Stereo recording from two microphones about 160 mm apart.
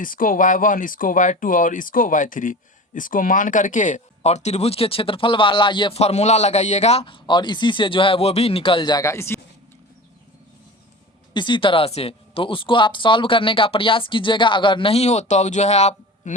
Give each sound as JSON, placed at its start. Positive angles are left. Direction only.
{"t": 0.0, "sound": "speech", "side_deg": 60}
{"t": 11.3, "sound": "speech", "side_deg": 30}